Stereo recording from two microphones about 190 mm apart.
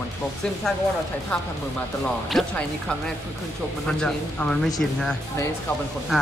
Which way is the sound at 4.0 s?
5° left (ahead or behind).